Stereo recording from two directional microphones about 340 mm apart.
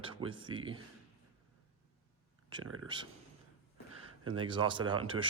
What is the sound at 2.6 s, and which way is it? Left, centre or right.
Speech, right.